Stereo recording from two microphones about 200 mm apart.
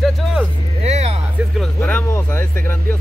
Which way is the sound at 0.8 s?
30° right (ahead or behind).